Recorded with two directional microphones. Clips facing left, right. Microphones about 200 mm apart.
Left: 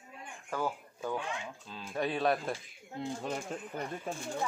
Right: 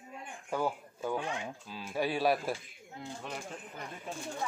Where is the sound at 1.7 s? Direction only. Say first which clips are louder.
Right 1 dB; 5° right (ahead or behind).